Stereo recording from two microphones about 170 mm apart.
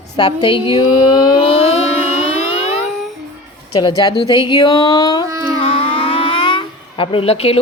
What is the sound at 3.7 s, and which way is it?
A woman's voice, 25° left (ahead or behind).